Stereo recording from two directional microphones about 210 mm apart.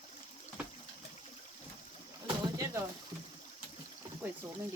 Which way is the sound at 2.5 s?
15° right (ahead or behind).